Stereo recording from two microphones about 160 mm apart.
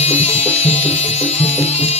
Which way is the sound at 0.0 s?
40° left (ahead or behind).